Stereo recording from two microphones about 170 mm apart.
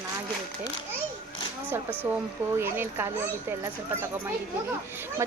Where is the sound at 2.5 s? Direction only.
15° right (ahead or behind).